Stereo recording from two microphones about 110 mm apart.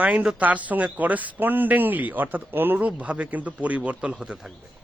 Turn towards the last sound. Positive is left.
turn(degrees=-5)  # may be behind; listen again after turning